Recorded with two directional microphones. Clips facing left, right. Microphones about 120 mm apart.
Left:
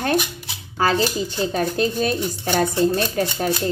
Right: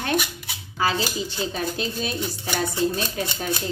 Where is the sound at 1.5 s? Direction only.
50° left (ahead or behind).